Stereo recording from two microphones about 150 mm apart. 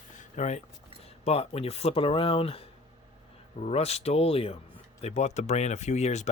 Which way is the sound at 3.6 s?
45° left (ahead or behind).